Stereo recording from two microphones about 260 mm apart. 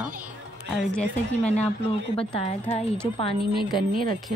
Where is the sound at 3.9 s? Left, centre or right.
Right.